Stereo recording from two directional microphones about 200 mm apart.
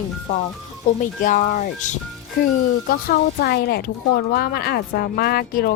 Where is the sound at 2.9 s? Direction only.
50° left (ahead or behind).